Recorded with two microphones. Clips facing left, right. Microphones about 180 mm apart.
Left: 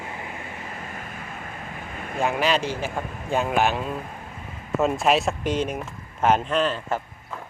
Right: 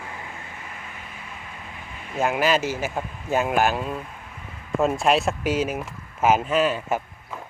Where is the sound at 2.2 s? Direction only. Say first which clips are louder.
Right 1 dB; centre (ahead or behind).